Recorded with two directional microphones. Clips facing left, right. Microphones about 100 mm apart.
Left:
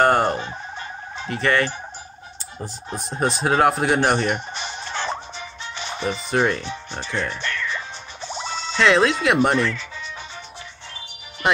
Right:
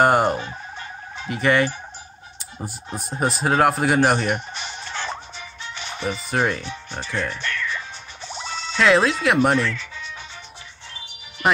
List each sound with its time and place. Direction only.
0.0 s fowl: 10° right (ahead or behind)
0.4 s a sound: 20° left (ahead or behind)
1.2 s fowl: 10° right (ahead or behind)
2.6 s speech: 5° right (ahead or behind)
4.6 s a sound: 30° left (ahead or behind)
5.8 s music: 30° left (ahead or behind)
6.3 s speech: 5° right (ahead or behind)
7.4 s music: 25° left (ahead or behind)
8.7 s speech: centre (ahead or behind)
11.4 s music: centre (ahead or behind)